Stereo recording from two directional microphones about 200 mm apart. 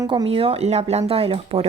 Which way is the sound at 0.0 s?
20° right (ahead or behind).